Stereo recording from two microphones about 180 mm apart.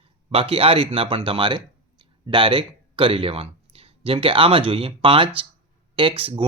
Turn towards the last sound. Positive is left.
turn(degrees=-30)  # may be behind; listen again after turning